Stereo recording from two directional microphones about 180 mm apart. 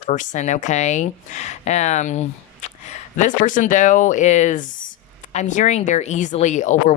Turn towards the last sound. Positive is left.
turn(degrees=40)  # may be behind; listen again after turning